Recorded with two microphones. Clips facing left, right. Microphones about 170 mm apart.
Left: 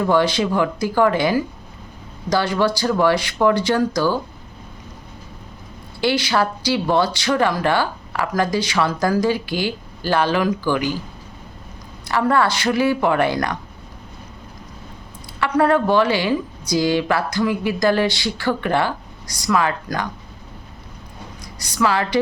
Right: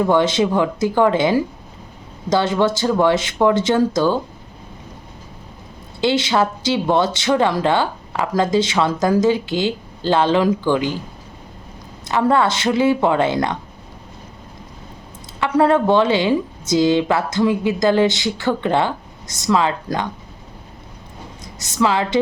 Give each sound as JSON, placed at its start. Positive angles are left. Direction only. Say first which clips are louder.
{"t": 0.0, "sound": "speech", "louder": "right 2 dB", "side_deg": -20}
{"t": 6.0, "sound": "speech", "louder": "right 2 dB", "side_deg": -20}
{"t": 12.0, "sound": "speech", "louder": "right 2 dB", "side_deg": -20}
{"t": 15.4, "sound": "speech", "louder": "right 2 dB", "side_deg": -20}
{"t": 21.4, "sound": "a woman's voice", "louder": "right 2 dB", "side_deg": -25}